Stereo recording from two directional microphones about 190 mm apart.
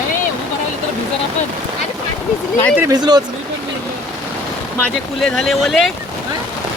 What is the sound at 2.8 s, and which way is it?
Speech, 20° right (ahead or behind).